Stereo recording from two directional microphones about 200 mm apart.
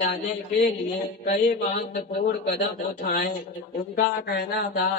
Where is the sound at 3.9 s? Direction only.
50° left (ahead or behind).